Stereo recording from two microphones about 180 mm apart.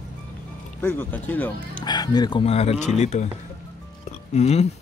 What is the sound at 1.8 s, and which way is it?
Speech, 20° left (ahead or behind).